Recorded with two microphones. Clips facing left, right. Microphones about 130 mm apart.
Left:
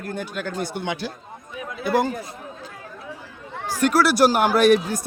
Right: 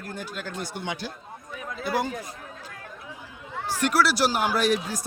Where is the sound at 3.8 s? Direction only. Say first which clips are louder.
Left 6 dB; 45° left (ahead or behind).